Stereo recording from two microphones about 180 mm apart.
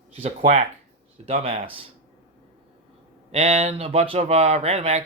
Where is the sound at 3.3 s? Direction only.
30° right (ahead or behind).